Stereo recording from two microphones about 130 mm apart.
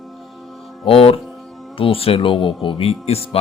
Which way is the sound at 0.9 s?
50° left (ahead or behind).